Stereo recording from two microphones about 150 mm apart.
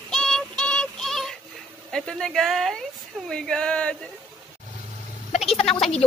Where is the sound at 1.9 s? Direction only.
5° left (ahead or behind).